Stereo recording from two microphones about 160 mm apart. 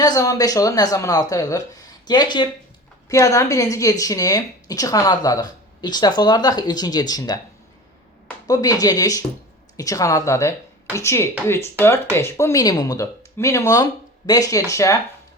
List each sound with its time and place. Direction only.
0.0 s a woman's voice: 25° left (ahead or behind)
8.4 s a woman's voice: 25° left (ahead or behind)